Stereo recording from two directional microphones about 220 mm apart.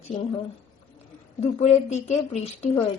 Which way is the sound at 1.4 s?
30° left (ahead or behind).